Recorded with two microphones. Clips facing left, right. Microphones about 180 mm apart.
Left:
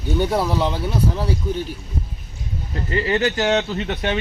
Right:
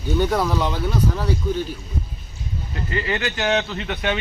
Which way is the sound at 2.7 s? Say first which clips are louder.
Left 4 dB; 35° left (ahead or behind).